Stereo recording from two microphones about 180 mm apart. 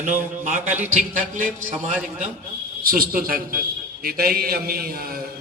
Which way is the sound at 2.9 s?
55° right (ahead or behind).